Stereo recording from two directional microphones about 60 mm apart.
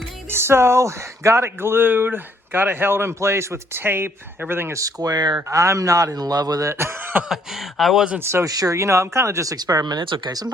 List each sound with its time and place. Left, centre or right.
0.3 s speech: right
4.7 s speech: right
5.5 s a man's voice: right
6.7 s speech: right
7.8 s speech: centre
8.2 s speech: right
8.4 s speech: right
8.8 s speech: right